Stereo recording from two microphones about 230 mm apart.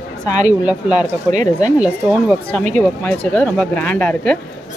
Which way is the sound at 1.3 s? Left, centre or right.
Right.